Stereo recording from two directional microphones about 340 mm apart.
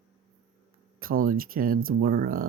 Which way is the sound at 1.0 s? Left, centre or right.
Right.